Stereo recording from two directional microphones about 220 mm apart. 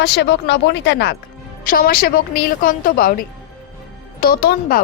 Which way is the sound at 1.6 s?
40° left (ahead or behind).